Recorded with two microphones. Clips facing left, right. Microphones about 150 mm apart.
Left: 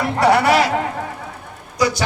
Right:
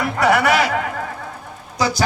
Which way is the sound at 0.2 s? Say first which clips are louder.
Left 2 dB; 35° left (ahead or behind).